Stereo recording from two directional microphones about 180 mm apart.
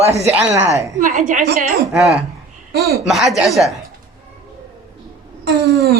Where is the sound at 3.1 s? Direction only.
Centre (ahead or behind).